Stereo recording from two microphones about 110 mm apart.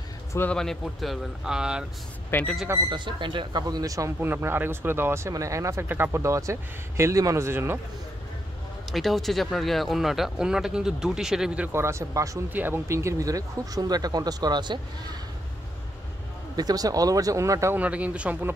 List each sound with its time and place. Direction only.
0.5 s speech: 5° left (ahead or behind)
2.3 s a man's voice: 20° left (ahead or behind)
2.9 s speech: 45° right (ahead or behind)
4.2 s speech: 20° right (ahead or behind)
8.9 s speech: centre (ahead or behind)
11.7 s speech: 25° right (ahead or behind)
12.4 s speech: 15° right (ahead or behind); by 15.1 s 40° right (ahead or behind)
16.5 s speech: 35° right (ahead or behind)
17.7 s speech: 15° right (ahead or behind)